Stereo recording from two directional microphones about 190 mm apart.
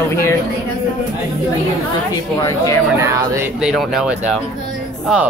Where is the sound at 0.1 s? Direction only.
15° left (ahead or behind).